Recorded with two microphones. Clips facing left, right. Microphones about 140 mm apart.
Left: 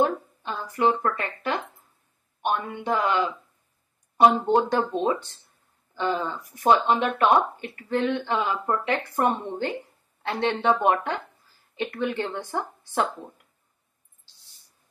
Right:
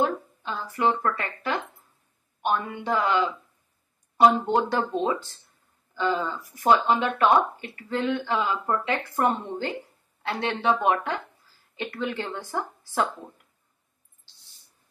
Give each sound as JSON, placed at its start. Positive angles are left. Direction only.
{"t": 0.0, "sound": "a woman's voice", "side_deg": 15}